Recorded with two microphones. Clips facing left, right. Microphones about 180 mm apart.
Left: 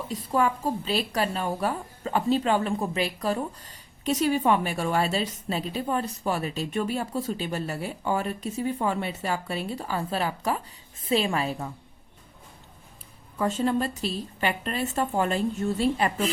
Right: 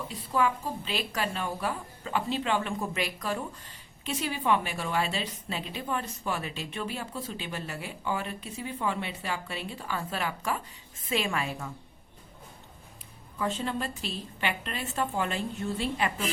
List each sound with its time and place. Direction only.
0.1 s a woman's voice: 45° left (ahead or behind)
13.4 s a woman's voice: 45° left (ahead or behind)